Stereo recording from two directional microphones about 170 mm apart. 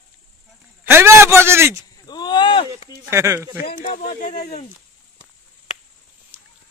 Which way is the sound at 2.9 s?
15° right (ahead or behind).